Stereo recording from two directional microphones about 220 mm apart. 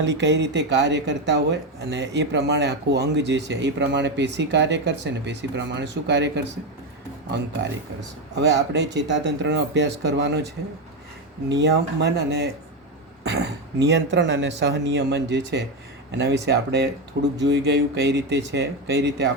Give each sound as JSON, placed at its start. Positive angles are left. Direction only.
{"t": 0.0, "sound": "speech", "side_deg": -55}
{"t": 8.4, "sound": "speech", "side_deg": -50}